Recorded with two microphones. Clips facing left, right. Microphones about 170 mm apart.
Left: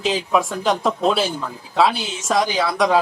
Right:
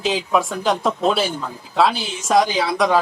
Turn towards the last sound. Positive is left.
turn(degrees=0)  # may be behind; listen again after turning